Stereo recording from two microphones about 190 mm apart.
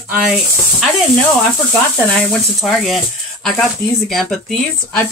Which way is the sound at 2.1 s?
5° left (ahead or behind).